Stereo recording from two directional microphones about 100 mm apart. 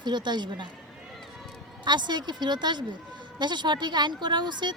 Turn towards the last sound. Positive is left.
turn(degrees=-50)  # may be behind; listen again after turning